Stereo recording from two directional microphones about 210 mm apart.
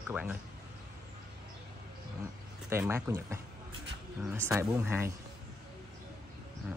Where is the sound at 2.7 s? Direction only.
10° right (ahead or behind).